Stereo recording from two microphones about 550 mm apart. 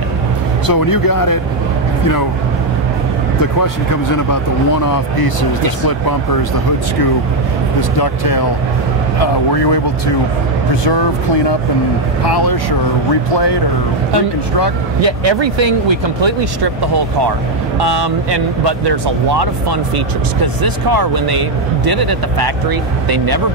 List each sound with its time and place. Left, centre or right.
0.7 s speech: left
3.6 s speech: left
8.0 s speech: left
12.3 s speech: left
15.0 s speech: right
20.6 s speech: right